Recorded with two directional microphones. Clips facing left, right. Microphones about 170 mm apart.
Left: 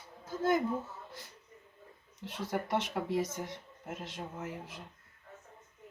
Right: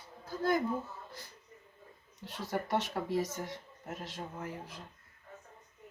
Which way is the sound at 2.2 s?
20° left (ahead or behind).